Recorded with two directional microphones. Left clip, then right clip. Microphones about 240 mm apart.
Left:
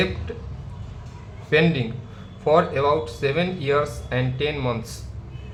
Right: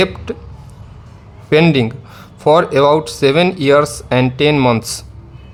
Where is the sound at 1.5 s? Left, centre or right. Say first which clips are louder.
Right 8 dB; right.